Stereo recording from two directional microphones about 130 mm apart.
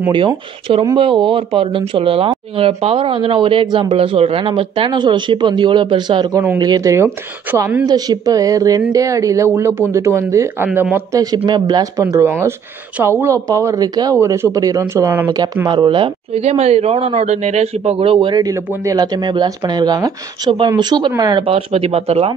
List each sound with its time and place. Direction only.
0.9 s a man's voice: 40° right (ahead or behind); by 7.6 s 15° right (ahead or behind)
7.8 s speech: 30° right (ahead or behind); by 11.0 s 15° right (ahead or behind)
11.3 s speech: 35° right (ahead or behind)
16.4 s a man's voice: 55° right (ahead or behind); by 21.5 s 30° right (ahead or behind)
21.5 s a man's voice: 45° right (ahead or behind)